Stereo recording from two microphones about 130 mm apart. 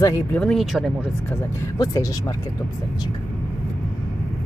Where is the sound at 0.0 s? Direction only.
25° left (ahead or behind).